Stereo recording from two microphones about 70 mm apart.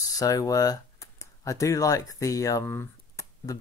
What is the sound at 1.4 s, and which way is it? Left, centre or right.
Speech, left.